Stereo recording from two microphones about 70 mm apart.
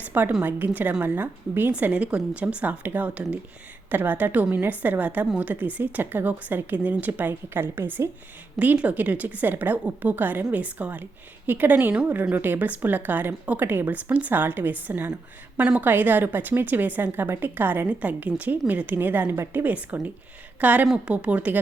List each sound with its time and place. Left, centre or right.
0.1 s a woman's voice: right